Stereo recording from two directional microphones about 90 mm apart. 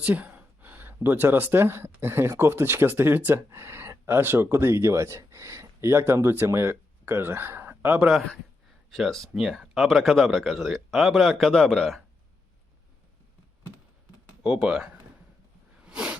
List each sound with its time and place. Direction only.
0.0 s speech: 20° right (ahead or behind)
8.0 s speech: centre (ahead or behind)
9.3 s speech: 5° right (ahead or behind)
14.4 s speech: 5° right (ahead or behind)
15.8 s a sound: 10° right (ahead or behind)